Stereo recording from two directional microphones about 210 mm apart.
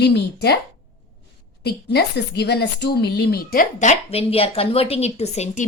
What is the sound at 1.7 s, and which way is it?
A woman's voice, 50° left (ahead or behind).